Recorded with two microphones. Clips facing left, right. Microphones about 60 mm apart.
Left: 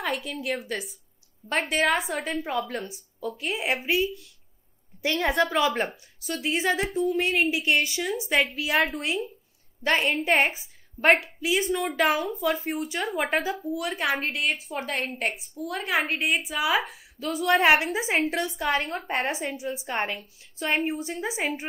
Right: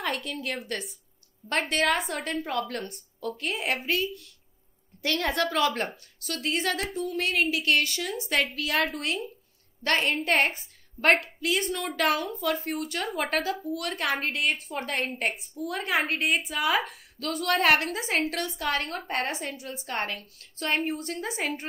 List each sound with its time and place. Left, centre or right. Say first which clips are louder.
0.0 s a woman's voice: left 1 dB; centre